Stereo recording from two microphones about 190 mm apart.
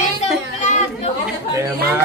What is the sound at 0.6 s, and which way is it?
Chatter, 40° left (ahead or behind).